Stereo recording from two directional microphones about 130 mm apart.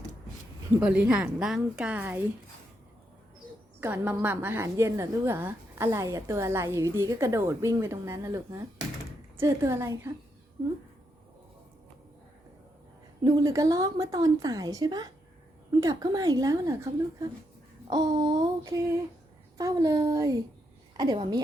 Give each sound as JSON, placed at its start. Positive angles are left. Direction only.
{"t": 0.8, "sound": "a woman's voice", "side_deg": -10}
{"t": 3.8, "sound": "a woman's voice", "side_deg": -15}
{"t": 13.2, "sound": "a woman's voice", "side_deg": -25}
{"t": 19.5, "sound": "a woman's voice", "side_deg": -30}